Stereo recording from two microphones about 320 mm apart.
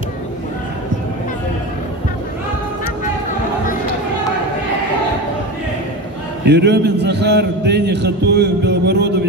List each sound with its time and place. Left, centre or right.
6.4 s a man's voice: right